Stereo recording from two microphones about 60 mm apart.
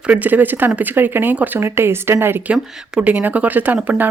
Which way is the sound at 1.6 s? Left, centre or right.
Right.